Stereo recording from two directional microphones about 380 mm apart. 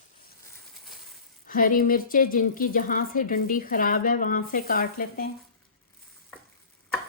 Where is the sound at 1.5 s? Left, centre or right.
Left.